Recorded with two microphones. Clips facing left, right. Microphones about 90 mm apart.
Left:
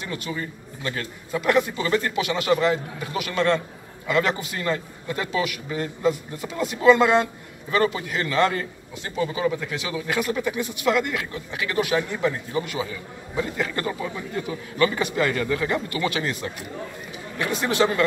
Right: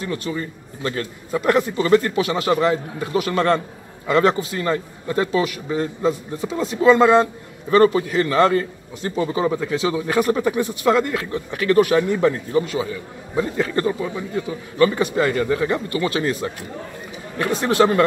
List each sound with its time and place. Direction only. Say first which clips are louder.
0.0 s a man's voice: right 6 dB; 35° right (ahead or behind)
1.4 s a man's voice: right 3 dB; 35° right (ahead or behind)
14.8 s a man's voice: right 5 dB; 35° right (ahead or behind)